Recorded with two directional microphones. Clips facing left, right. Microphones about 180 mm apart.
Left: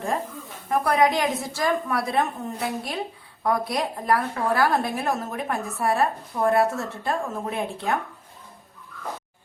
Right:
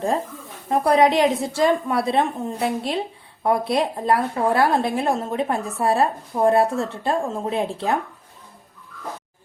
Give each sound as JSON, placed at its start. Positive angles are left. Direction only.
{"t": 0.7, "sound": "a woman's voice", "side_deg": -30}